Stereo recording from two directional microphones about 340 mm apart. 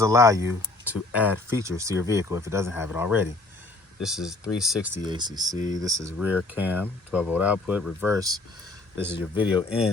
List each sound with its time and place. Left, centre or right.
0.0 s speech: centre
5.5 s speech: left
5.8 s speech: centre